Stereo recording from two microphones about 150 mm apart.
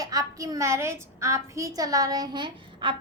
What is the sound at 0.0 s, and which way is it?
A woman's voice, 25° right (ahead or behind).